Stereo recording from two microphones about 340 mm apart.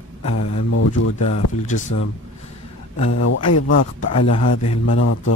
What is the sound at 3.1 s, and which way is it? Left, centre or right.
Speech, left.